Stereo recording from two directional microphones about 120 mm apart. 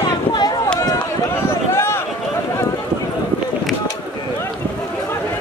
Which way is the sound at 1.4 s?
20° left (ahead or behind).